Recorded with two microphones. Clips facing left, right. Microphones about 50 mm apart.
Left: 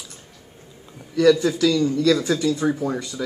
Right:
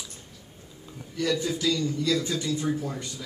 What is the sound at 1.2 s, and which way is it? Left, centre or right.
A man's voice, left.